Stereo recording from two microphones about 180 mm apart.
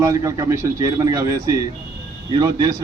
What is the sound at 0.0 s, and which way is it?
A man's voice, 15° right (ahead or behind).